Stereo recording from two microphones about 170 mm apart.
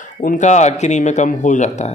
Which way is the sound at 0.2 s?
50° left (ahead or behind).